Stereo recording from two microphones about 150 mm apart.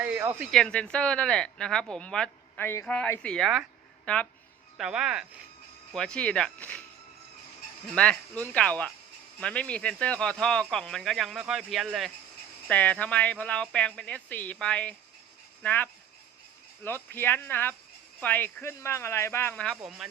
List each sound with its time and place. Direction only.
0.0 s a sound: 10° right (ahead or behind)
0.5 s speech: 5° left (ahead or behind)
7.9 s speech: 5° left (ahead or behind)
19.6 s speech: 5° right (ahead or behind)